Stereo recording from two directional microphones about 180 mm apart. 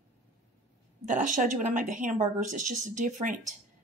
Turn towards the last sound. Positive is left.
turn(degrees=-45)  # may be behind; listen again after turning